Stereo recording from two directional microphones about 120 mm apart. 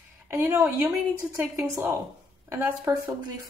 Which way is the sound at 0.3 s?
25° right (ahead or behind).